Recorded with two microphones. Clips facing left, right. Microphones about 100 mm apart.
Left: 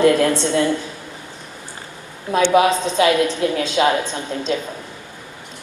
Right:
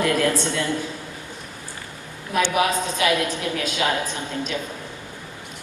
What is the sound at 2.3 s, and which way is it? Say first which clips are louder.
A woman's voice: left 6 dB; 25° left (ahead or behind).